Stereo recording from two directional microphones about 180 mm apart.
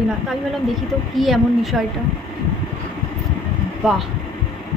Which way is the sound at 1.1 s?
Centre (ahead or behind).